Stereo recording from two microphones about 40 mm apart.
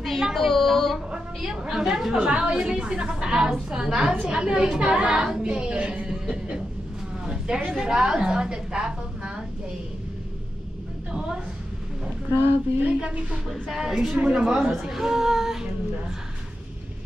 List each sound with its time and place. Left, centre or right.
0.0 s a sound: centre
1.1 s a woman's voice: centre
2.2 s a woman's voice: right
5.8 s speech: right
6.0 s music: right
7.2 s a sound: centre
7.8 s a woman's voice: centre
13.0 s speech: right
13.5 s female singing: centre
14.1 s a woman's voice: right
14.4 s female singing: centre